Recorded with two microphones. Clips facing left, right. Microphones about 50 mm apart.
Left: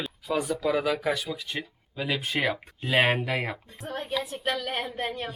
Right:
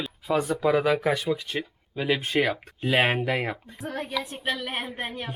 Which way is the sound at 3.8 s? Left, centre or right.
Right.